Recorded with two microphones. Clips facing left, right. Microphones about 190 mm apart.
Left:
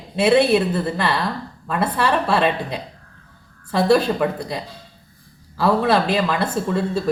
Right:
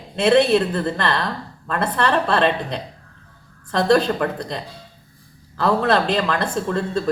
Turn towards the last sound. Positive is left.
turn(degrees=5)  # may be behind; listen again after turning